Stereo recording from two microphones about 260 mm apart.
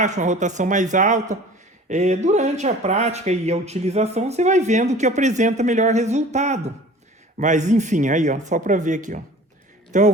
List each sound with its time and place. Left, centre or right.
0.0 s speech: right